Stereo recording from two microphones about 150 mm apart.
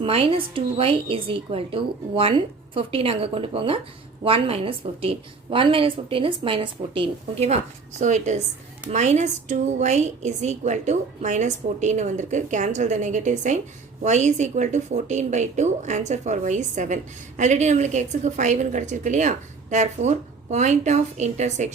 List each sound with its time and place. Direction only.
0.0 s a woman's voice: 40° right (ahead or behind)